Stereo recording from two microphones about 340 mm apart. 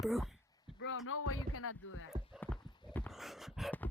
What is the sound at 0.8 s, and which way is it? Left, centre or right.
Speech, left.